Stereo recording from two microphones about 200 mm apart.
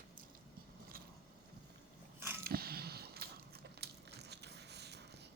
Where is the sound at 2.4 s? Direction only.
50° right (ahead or behind).